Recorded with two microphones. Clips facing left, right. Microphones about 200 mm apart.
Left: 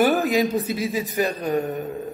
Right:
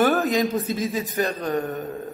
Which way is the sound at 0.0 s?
15° left (ahead or behind).